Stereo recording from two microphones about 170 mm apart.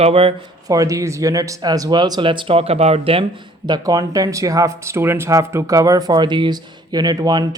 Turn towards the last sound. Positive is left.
turn(degrees=-25)  # may be behind; listen again after turning